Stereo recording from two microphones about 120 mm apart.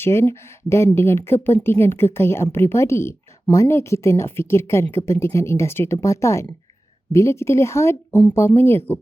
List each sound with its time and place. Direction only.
0.0 s speech: 20° left (ahead or behind)